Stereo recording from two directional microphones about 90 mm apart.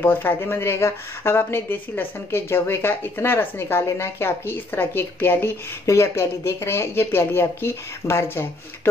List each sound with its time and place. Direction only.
0.0 s speech: 20° left (ahead or behind)